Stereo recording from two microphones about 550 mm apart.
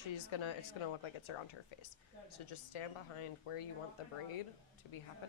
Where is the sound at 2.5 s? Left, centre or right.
Left.